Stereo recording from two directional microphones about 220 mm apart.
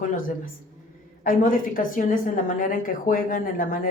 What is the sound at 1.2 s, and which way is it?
Speech, 40° left (ahead or behind).